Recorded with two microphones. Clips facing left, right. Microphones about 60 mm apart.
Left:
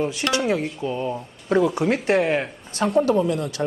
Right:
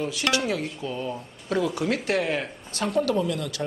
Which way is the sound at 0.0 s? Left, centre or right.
Left.